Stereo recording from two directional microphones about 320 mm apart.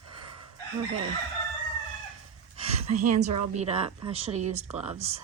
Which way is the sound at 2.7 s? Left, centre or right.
Right.